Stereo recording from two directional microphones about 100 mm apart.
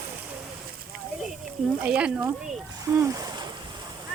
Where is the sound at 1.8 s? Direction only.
10° right (ahead or behind).